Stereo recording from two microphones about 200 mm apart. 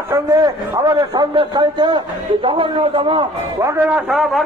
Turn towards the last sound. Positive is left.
turn(degrees=0)  # may be behind; listen again after turning